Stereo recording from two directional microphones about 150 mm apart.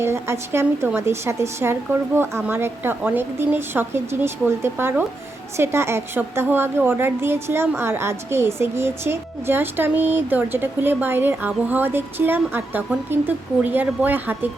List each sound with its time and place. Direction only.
0.0 s a woman's voice: 15° right (ahead or behind)